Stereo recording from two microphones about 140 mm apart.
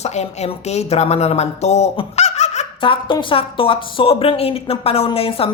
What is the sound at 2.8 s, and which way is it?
A woman's voice, 35° left (ahead or behind).